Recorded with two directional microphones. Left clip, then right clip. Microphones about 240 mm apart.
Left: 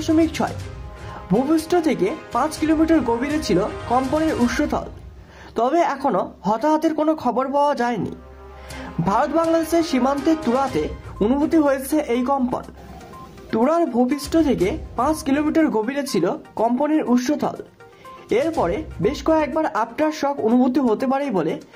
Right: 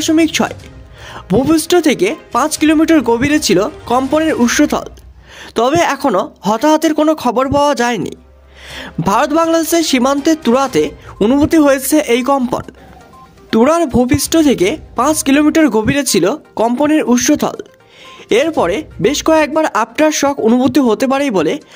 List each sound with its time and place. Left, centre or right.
0.0 s speech: right